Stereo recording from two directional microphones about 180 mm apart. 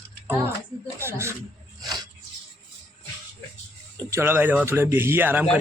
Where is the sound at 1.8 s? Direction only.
25° right (ahead or behind).